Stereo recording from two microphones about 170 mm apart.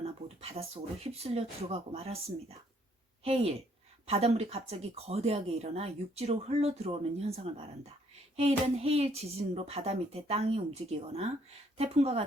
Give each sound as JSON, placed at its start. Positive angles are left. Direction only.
{"t": 0.0, "sound": "speech", "side_deg": -35}